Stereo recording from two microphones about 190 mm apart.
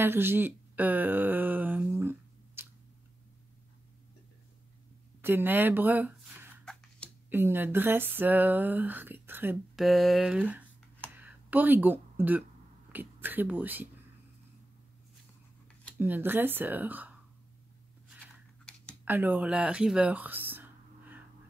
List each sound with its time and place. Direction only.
0.0 s a sound: 10° right (ahead or behind)
5.2 s speech: 10° right (ahead or behind)
6.6 s a sound: 5° left (ahead or behind)
7.2 s speech: 10° right (ahead or behind)
9.8 s speech: centre (ahead or behind)
16.0 s speech: 10° right (ahead or behind)
18.2 s scissors: 5° left (ahead or behind)
19.0 s speech: 10° right (ahead or behind)